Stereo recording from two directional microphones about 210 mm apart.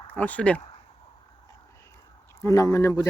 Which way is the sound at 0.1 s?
5° left (ahead or behind).